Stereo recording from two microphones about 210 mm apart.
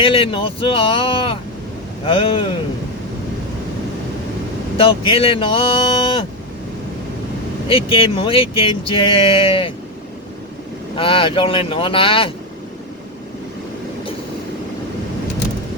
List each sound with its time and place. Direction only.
0.0 s speech: 25° left (ahead or behind)
4.8 s speech: 25° left (ahead or behind)
7.7 s speech: 25° left (ahead or behind)
10.9 s speech: 25° left (ahead or behind)